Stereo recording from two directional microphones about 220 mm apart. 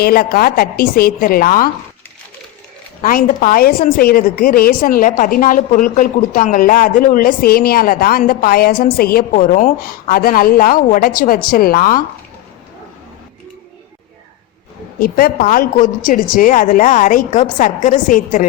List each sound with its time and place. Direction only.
0.0 s a woman's voice: 40° left (ahead or behind)
3.0 s a woman's voice: 40° left (ahead or behind)
14.9 s a woman's voice: 40° left (ahead or behind)